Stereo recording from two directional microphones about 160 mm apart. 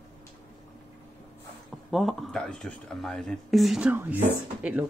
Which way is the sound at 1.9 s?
Centre (ahead or behind).